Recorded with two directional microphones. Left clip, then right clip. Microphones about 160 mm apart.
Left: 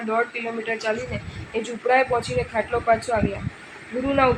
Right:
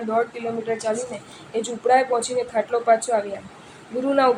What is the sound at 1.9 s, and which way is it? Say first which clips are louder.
Speech: right 1 dB; 30° right (ahead or behind).